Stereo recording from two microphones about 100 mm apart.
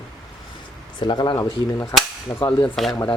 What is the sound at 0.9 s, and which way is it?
Speech, 50° left (ahead or behind).